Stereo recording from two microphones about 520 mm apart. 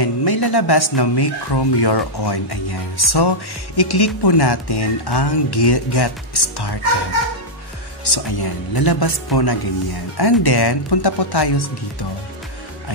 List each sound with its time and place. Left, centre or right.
0.0 s speech: left
8.0 s speech: left